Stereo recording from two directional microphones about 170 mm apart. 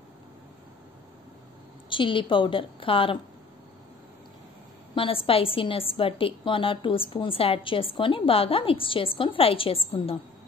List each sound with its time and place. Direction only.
1.9 s a woman's voice: 30° left (ahead or behind)
4.9 s a woman's voice: 30° left (ahead or behind)